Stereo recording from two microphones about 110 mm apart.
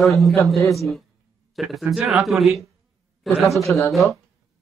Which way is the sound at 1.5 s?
Centre (ahead or behind).